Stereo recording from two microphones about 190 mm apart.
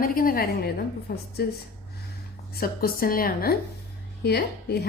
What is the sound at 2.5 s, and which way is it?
A woman's voice, 50° left (ahead or behind).